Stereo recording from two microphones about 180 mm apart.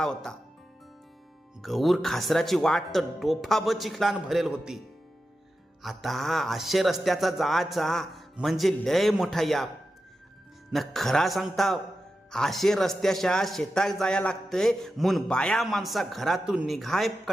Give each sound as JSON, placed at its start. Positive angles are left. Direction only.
{"t": 0.0, "sound": "a man's voice", "side_deg": 5}
{"t": 1.6, "sound": "a man's voice", "side_deg": 0}
{"t": 5.8, "sound": "a man's voice", "side_deg": 0}
{"t": 10.7, "sound": "a man's voice", "side_deg": 0}